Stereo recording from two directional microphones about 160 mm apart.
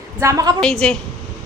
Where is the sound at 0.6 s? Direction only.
5° left (ahead or behind).